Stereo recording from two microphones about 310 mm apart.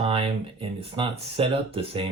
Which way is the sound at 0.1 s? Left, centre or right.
Centre.